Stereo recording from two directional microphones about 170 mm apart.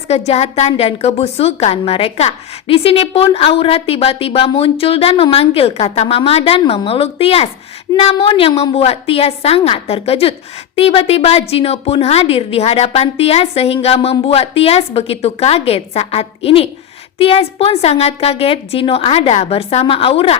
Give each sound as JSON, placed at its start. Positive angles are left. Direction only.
{"t": 0.3, "sound": "a woman's voice", "side_deg": 40}